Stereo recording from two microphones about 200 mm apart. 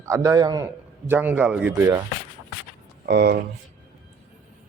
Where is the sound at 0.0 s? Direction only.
15° right (ahead or behind).